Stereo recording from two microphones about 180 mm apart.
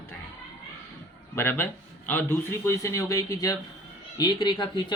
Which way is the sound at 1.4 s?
15° left (ahead or behind).